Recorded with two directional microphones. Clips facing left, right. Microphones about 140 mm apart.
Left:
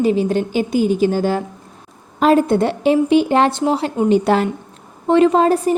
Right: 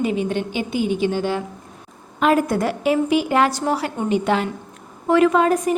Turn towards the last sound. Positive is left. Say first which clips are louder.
# left 3 dB
turn(degrees=30)  # may be behind; listen again after turning